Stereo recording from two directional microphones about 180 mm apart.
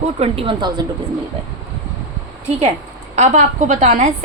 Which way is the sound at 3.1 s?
40° right (ahead or behind).